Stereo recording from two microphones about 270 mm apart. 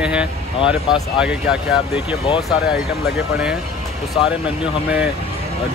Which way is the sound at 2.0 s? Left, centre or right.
Left.